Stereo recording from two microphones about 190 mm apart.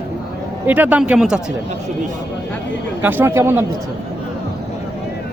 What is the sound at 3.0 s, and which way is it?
Speech, 10° right (ahead or behind).